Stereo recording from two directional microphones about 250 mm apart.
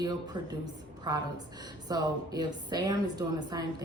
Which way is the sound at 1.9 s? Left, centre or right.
Centre.